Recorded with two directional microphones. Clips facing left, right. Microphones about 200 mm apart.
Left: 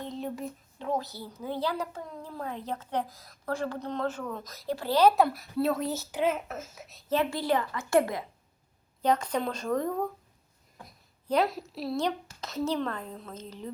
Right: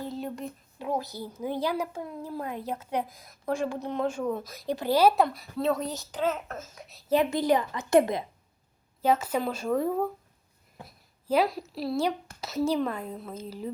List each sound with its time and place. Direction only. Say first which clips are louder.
0.0 s whispering: right 1 dB; 5° right (ahead or behind)
0.8 s a child's voice: right 1 dB; 10° right (ahead or behind)
5.2 s speech: even; 5° left (ahead or behind)
7.1 s a woman's voice: right 4 dB; 15° right (ahead or behind)
9.0 s a child's voice: right 2 dB; 5° right (ahead or behind)